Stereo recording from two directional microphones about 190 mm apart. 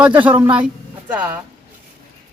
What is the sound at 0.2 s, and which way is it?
Speech, 10° right (ahead or behind).